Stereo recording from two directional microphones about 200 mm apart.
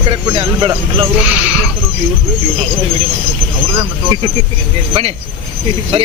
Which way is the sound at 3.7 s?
20° right (ahead or behind).